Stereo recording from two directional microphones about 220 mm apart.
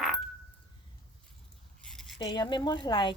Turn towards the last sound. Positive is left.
turn(degrees=20)  # may be behind; listen again after turning